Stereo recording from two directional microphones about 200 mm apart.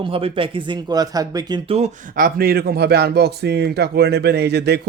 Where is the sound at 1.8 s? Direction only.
45° right (ahead or behind).